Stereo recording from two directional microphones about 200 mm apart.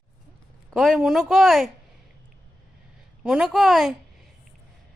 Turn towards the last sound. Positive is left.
turn(degrees=0)  # may be behind; listen again after turning